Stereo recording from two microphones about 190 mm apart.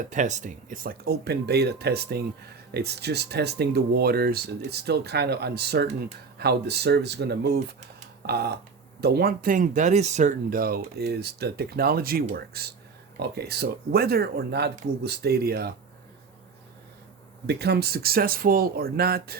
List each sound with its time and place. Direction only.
0.1 s speech: 40° right (ahead or behind); by 15.7 s 55° right (ahead or behind)
17.4 s speech: 60° right (ahead or behind)